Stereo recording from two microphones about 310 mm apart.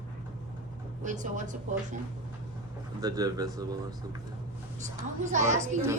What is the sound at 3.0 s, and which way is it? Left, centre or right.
Speech, centre.